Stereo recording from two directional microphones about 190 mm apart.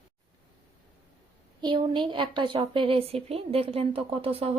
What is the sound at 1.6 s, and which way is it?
A woman's voice, 25° right (ahead or behind).